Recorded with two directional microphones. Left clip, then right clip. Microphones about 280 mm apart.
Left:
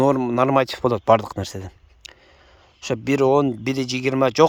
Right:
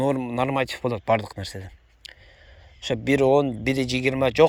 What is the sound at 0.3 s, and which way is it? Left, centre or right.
Speech, centre.